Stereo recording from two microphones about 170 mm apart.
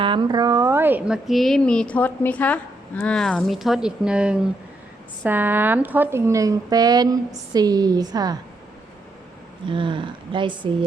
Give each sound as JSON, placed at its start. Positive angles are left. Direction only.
{"t": 0.0, "sound": "speech", "side_deg": -25}
{"t": 9.6, "sound": "speech", "side_deg": -30}